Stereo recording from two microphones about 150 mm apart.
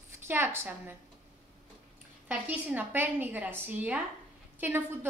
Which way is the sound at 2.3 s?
10° right (ahead or behind).